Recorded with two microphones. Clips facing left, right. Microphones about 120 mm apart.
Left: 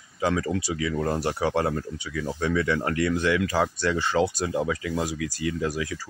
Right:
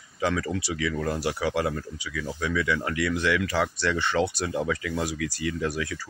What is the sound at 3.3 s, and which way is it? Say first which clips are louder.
Speech: left 2 dB; 35° left (ahead or behind).